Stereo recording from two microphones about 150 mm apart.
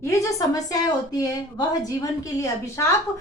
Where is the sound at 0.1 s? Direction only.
20° left (ahead or behind).